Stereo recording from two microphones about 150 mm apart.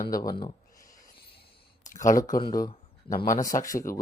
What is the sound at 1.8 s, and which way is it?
Speech, 60° left (ahead or behind).